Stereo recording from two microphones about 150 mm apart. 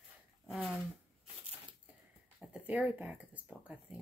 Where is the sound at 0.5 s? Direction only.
Centre (ahead or behind).